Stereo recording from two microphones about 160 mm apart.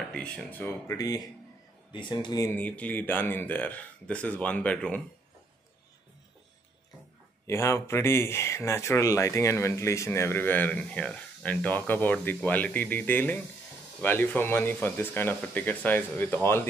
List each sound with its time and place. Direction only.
0.1 s speech: 5° left (ahead or behind); by 2.5 s 20° left (ahead or behind)
2.5 s speech: 10° left (ahead or behind)
7.4 s speech: 15° left (ahead or behind)